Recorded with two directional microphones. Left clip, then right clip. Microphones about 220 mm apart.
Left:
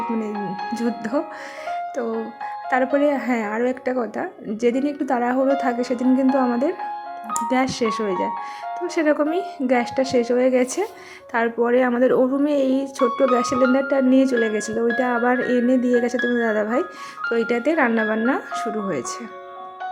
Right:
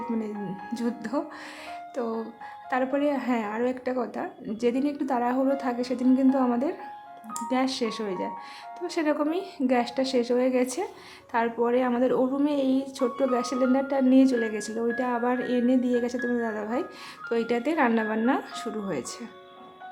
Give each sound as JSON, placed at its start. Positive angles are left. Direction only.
{"t": 0.3, "sound": "music", "side_deg": 50}
{"t": 0.7, "sound": "a woman's voice", "side_deg": 15}
{"t": 1.6, "sound": "music", "side_deg": 15}
{"t": 2.6, "sound": "a woman's voice", "side_deg": 15}